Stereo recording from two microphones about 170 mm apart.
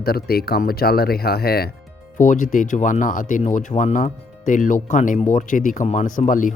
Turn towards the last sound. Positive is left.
turn(degrees=50)  # may be behind; listen again after turning